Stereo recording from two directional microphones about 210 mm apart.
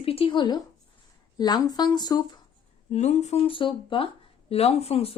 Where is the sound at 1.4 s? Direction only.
20° left (ahead or behind).